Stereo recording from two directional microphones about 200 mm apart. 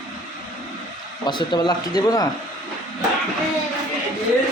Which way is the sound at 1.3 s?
20° left (ahead or behind).